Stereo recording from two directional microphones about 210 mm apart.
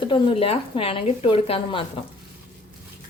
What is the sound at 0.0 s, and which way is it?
Speech, 25° left (ahead or behind).